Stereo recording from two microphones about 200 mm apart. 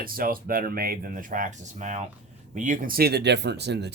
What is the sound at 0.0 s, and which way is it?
Speech, 45° right (ahead or behind).